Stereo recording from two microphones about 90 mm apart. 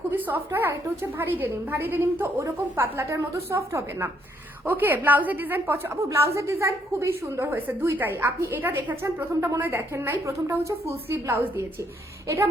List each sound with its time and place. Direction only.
0.1 s a woman's voice: 20° right (ahead or behind)
4.6 s a woman's voice: 20° right (ahead or behind)
6.0 s a woman's voice: 35° right (ahead or behind)
7.5 s a woman's voice: 20° right (ahead or behind)